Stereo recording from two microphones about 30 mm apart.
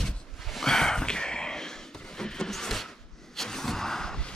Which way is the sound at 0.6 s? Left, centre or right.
Centre.